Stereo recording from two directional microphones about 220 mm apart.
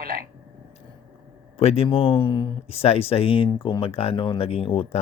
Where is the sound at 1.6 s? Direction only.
25° left (ahead or behind).